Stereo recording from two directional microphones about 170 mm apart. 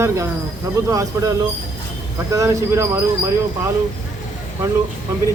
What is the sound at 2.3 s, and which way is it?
Speech, 15° right (ahead or behind).